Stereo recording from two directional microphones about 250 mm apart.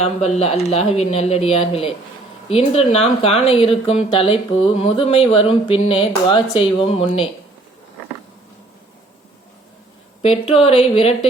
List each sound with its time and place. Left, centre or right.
0.0 s speech: left
10.2 s speech: left